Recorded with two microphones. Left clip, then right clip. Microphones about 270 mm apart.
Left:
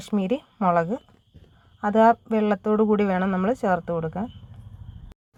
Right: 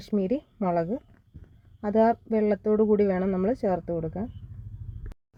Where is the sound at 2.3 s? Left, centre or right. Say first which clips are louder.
Left 2 dB; left.